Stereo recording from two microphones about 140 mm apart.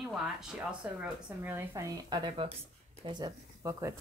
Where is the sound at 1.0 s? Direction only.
15° right (ahead or behind).